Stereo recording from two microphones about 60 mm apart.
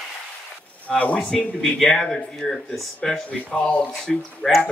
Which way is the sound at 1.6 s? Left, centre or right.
Centre.